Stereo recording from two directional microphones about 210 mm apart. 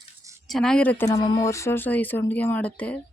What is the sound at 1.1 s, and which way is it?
Speech, 20° left (ahead or behind).